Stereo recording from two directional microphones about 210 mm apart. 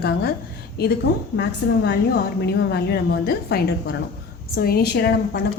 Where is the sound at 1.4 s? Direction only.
50° left (ahead or behind).